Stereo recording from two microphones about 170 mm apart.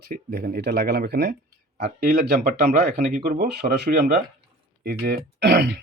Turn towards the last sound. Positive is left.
turn(degrees=-80)